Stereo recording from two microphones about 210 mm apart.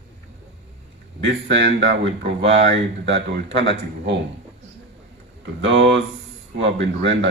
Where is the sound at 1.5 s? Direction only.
55° right (ahead or behind).